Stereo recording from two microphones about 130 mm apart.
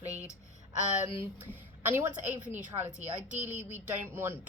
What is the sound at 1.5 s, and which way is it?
Speech, 15° right (ahead or behind).